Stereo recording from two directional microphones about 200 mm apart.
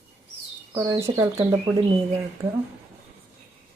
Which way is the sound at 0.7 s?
15° right (ahead or behind).